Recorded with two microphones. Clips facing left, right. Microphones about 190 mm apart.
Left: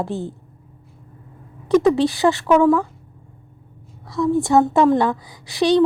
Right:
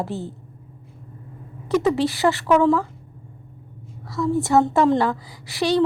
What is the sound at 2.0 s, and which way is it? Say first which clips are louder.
Speech: left 3 dB; 15° left (ahead or behind).